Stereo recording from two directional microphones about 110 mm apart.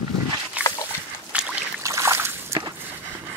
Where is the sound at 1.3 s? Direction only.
15° right (ahead or behind).